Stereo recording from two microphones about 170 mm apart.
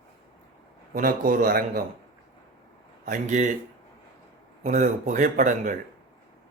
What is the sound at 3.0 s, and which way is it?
Speech, 45° right (ahead or behind).